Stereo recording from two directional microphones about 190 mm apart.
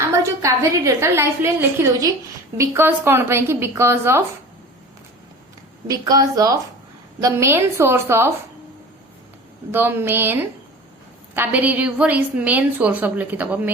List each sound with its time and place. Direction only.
0.4 s a woman's voice: 15° right (ahead or behind)
5.9 s a woman's voice: 20° right (ahead or behind)
9.7 s a woman's voice: 10° right (ahead or behind)
11.3 s a woman's voice: 10° right (ahead or behind)